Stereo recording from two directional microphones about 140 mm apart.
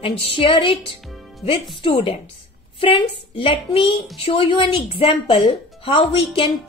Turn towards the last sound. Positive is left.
turn(degrees=40)  # may be behind; listen again after turning